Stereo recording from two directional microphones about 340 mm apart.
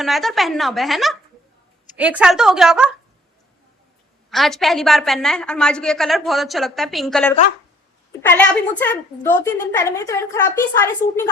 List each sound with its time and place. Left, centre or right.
0.0 s a woman's voice: centre
4.3 s a woman's voice: centre